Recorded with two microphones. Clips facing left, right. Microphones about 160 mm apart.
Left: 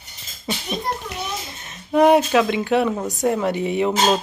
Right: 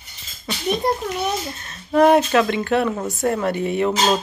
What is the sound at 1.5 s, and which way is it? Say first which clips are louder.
Speech: even; 15° left (ahead or behind).